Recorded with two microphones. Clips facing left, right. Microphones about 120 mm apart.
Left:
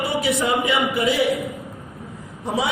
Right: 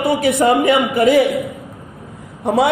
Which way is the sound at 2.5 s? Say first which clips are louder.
Right 9 dB; 60° right (ahead or behind).